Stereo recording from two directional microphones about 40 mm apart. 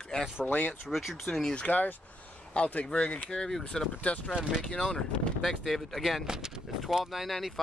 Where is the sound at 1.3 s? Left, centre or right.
Centre.